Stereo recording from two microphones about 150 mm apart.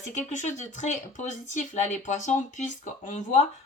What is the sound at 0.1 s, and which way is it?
Speech, 50° left (ahead or behind).